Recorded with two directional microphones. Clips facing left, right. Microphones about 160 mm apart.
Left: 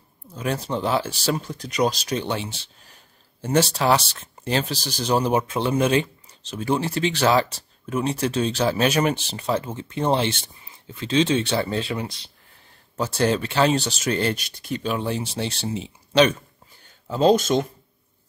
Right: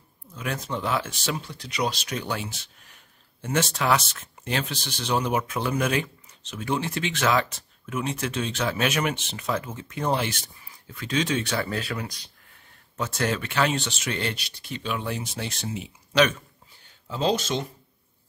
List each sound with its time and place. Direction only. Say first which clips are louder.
0.3 s speech: left 5 dB; 30° left (ahead or behind)
17.1 s speech: left 7 dB; 45° left (ahead or behind)